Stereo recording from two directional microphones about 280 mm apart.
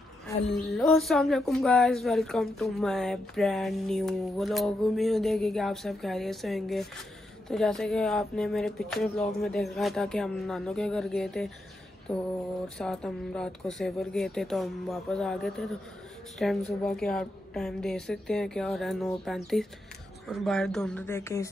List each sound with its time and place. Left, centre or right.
0.5 s speech: centre